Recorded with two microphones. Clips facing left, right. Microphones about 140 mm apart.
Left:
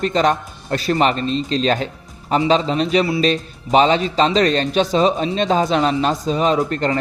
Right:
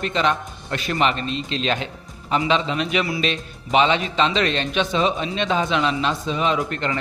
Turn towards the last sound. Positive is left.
turn(degrees=35)  # may be behind; listen again after turning